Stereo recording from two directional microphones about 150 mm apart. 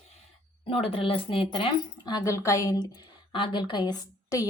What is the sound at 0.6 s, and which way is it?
A woman's voice, 35° left (ahead or behind).